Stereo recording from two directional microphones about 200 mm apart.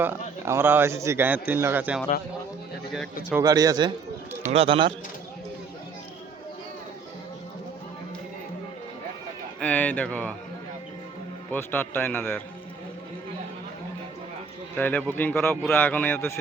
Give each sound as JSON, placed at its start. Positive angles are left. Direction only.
{"t": 0.0, "sound": "a man's voice", "side_deg": -10}
{"t": 3.4, "sound": "speech", "side_deg": -20}
{"t": 9.6, "sound": "a man's voice", "side_deg": 5}
{"t": 11.5, "sound": "a man's voice", "side_deg": 10}
{"t": 14.8, "sound": "a man's voice", "side_deg": 10}